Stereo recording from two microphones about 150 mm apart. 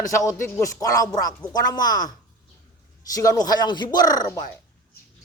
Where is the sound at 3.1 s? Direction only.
25° left (ahead or behind).